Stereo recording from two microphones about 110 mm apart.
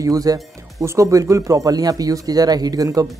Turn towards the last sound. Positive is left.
turn(degrees=-35)  # may be behind; listen again after turning